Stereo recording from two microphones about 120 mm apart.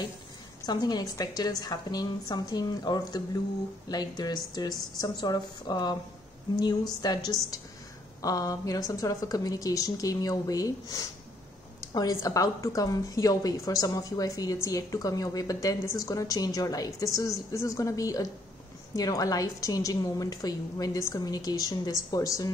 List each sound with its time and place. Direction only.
0.7 s a woman's voice: 35° left (ahead or behind)
8.2 s a woman's voice: 30° left (ahead or behind)